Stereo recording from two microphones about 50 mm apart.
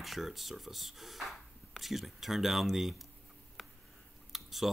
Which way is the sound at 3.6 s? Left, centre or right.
Centre.